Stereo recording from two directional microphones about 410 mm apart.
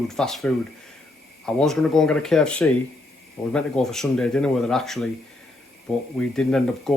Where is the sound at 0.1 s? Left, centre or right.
Centre.